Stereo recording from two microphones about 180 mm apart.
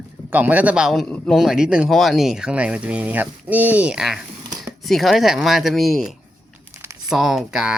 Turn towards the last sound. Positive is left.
turn(degrees=-5)  # may be behind; listen again after turning